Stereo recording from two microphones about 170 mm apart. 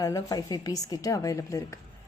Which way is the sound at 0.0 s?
20° left (ahead or behind).